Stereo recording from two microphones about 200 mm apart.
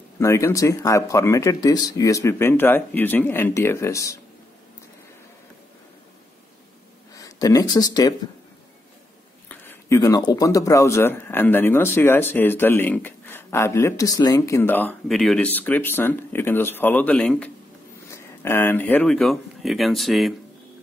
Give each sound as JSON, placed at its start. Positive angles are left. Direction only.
{"t": 0.2, "sound": "speech", "side_deg": 15}
{"t": 7.2, "sound": "speech", "side_deg": 15}
{"t": 9.5, "sound": "speech", "side_deg": 10}